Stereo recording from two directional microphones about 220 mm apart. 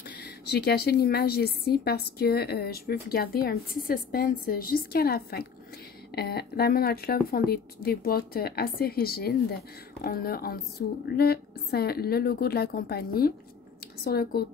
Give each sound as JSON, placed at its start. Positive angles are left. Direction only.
{"t": 0.2, "sound": "a woman's voice", "side_deg": 45}